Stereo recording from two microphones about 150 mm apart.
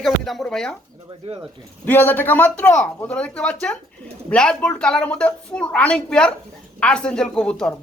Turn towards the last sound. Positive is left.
turn(degrees=5)  # may be behind; listen again after turning